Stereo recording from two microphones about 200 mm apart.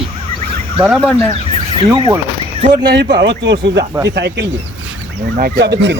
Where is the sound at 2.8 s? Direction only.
55° right (ahead or behind).